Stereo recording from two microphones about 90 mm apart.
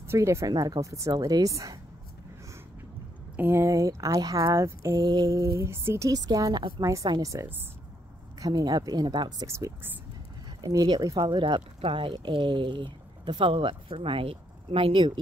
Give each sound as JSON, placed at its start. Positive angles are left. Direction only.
{"t": 0.1, "sound": "speech", "side_deg": -35}
{"t": 1.1, "sound": "speech", "side_deg": -45}
{"t": 3.3, "sound": "speech", "side_deg": -25}
{"t": 5.0, "sound": "speech", "side_deg": -45}
{"t": 6.0, "sound": "speech", "side_deg": -45}
{"t": 9.5, "sound": "speech", "side_deg": -35}
{"t": 10.6, "sound": "speech", "side_deg": -45}
{"t": 11.2, "sound": "speech", "side_deg": -60}